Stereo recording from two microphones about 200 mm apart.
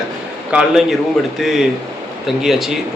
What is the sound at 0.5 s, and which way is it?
A man's voice, centre (ahead or behind).